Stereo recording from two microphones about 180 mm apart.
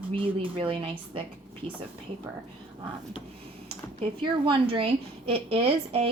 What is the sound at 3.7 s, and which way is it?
A woman's voice, 30° right (ahead or behind).